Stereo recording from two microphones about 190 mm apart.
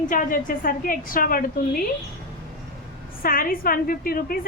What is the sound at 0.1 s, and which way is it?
A woman's voice, 45° left (ahead or behind).